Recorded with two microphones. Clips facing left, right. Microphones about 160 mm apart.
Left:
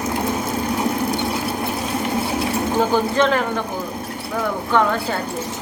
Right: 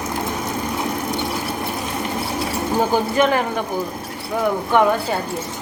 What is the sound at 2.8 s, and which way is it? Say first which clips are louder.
Speech: right 1 dB; 15° right (ahead or behind).